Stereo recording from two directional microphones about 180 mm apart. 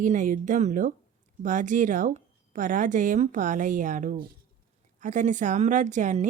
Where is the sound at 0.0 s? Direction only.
45° right (ahead or behind).